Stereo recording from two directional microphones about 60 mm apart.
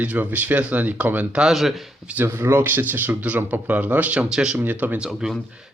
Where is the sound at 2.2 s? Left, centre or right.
Right.